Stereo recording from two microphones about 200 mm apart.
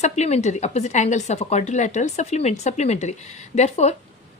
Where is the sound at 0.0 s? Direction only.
35° left (ahead or behind).